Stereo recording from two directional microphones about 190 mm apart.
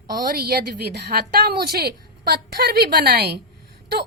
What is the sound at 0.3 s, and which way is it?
A woman's voice, 55° right (ahead or behind).